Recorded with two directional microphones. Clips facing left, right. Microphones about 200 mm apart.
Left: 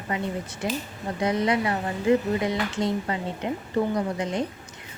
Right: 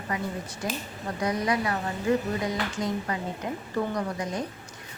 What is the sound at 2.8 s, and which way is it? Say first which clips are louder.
Speech: left 3 dB; 25° left (ahead or behind).